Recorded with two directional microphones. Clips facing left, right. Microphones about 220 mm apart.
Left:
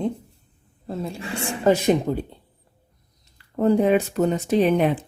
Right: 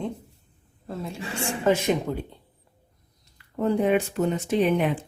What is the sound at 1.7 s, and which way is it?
Speech, 40° left (ahead or behind).